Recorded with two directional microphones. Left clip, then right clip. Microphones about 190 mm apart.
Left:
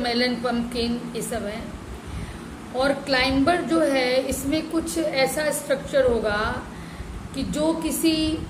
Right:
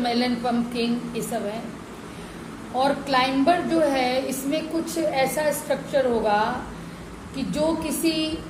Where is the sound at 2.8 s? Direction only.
15° left (ahead or behind).